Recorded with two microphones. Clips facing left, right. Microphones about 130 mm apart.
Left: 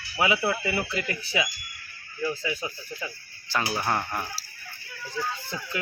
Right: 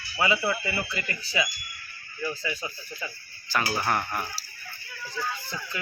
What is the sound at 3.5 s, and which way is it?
Speech, 20° left (ahead or behind).